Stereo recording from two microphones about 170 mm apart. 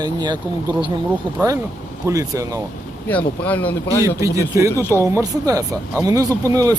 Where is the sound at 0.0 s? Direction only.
25° right (ahead or behind).